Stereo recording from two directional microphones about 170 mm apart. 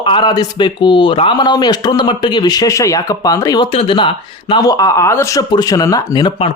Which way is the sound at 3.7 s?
35° left (ahead or behind).